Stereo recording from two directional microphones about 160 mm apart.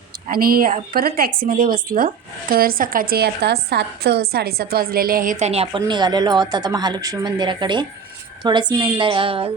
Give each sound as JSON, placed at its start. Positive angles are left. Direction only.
{"t": 0.3, "sound": "a woman's voice", "side_deg": -65}
{"t": 5.8, "sound": "a woman's voice", "side_deg": -25}